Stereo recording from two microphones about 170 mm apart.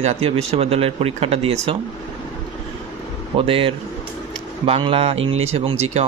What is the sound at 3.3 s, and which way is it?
Speech, 35° right (ahead or behind).